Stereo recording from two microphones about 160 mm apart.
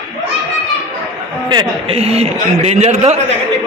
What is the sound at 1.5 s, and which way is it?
A man's voice, 35° right (ahead or behind).